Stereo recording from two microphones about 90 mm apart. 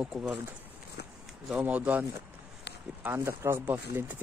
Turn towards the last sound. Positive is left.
turn(degrees=-15)  # may be behind; listen again after turning